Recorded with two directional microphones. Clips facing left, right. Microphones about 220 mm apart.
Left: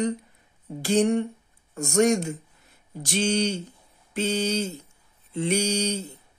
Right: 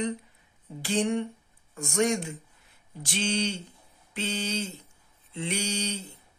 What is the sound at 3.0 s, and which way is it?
Mantra, 40° left (ahead or behind).